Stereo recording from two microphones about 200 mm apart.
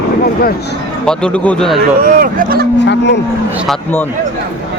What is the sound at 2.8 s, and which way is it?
Speech, 60° left (ahead or behind).